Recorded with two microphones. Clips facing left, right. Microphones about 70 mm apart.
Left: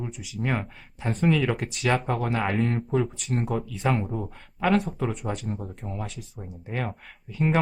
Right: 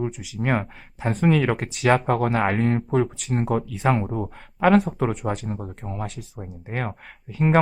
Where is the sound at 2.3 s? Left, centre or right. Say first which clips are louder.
Right 4 dB; right.